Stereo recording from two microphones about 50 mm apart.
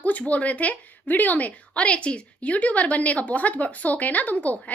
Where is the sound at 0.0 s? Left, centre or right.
Left.